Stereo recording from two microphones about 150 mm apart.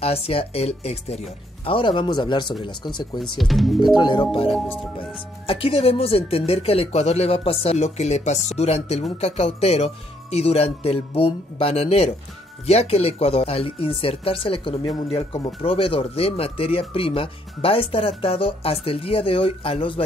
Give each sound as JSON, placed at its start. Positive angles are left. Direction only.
{"t": 0.0, "sound": "speech", "side_deg": 40}
{"t": 3.3, "sound": "speech", "side_deg": 0}
{"t": 3.9, "sound": "speech", "side_deg": 30}